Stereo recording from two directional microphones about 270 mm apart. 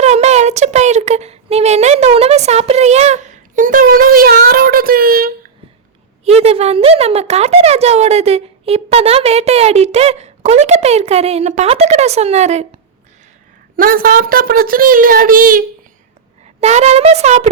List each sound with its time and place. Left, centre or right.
0.0 s a sound: right
6.2 s speech: right
13.7 s a child's voice: right